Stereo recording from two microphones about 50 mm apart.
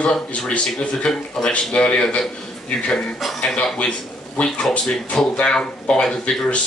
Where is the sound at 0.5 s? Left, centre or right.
Centre.